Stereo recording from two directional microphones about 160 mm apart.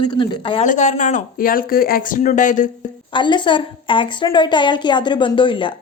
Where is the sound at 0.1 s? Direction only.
30° left (ahead or behind).